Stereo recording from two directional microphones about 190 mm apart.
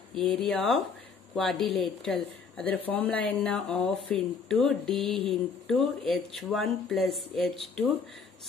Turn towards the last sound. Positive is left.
turn(degrees=5)  # may be behind; listen again after turning